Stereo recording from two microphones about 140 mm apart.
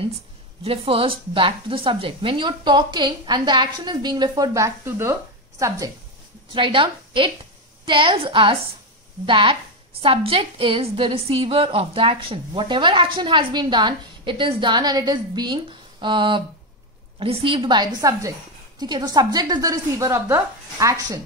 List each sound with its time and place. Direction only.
0.7 s a woman's voice: 40° right (ahead or behind); by 5.7 s 25° right (ahead or behind)
6.5 s a woman's voice: 35° right (ahead or behind)